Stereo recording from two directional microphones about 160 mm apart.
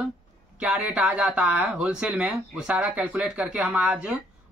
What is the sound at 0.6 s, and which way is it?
Speech, 10° right (ahead or behind).